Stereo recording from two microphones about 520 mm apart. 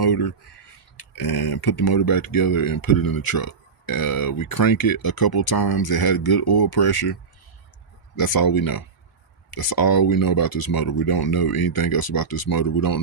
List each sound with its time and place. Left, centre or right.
0.0 s speech: left